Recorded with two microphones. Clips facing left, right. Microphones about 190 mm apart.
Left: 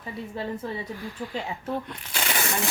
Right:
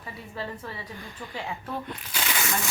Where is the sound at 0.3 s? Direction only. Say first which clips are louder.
Left 4 dB; 25° left (ahead or behind).